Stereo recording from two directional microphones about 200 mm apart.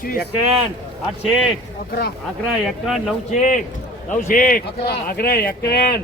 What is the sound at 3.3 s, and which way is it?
A man's voice, 35° left (ahead or behind).